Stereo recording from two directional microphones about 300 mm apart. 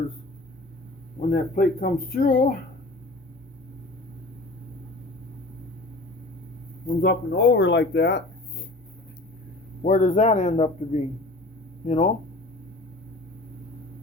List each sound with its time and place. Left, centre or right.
1.3 s speech: left
7.0 s speech: left
9.8 s speech: left